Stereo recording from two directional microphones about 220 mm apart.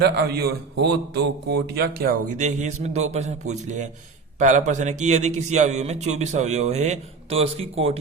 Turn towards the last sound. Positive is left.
turn(degrees=-25)  # may be behind; listen again after turning